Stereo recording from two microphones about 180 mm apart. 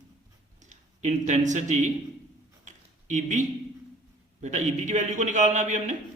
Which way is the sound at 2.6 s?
45° right (ahead or behind).